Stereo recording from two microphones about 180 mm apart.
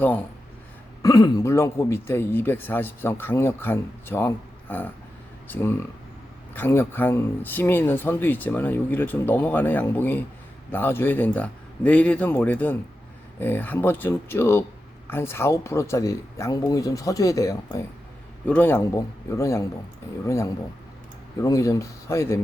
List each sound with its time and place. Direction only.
0.0 s speech: 10° left (ahead or behind)
1.0 s speech: 20° left (ahead or behind)
6.5 s speech: 10° left (ahead or behind)